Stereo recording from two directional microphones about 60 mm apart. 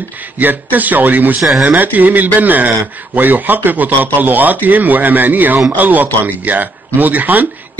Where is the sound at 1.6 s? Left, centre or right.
Right.